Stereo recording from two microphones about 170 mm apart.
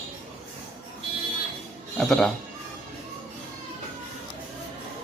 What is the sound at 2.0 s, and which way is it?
Speech, 5° left (ahead or behind).